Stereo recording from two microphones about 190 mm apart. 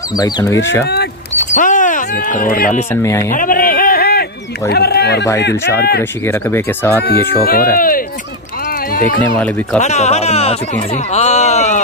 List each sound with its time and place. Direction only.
0.2 s speech: 15° left (ahead or behind)
1.4 s a sound: 40° left (ahead or behind)
2.9 s speech: 15° left (ahead or behind)
3.3 s a sound: 45° left (ahead or behind)
5.8 s speech: 55° left (ahead or behind)
6.2 s speech: 10° left (ahead or behind)
7.7 s speech: 50° left (ahead or behind)
9.8 s music: 35° left (ahead or behind)
11.1 s a sound: 35° left (ahead or behind)